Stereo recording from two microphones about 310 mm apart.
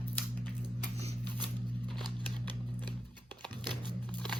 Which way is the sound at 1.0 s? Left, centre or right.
Centre.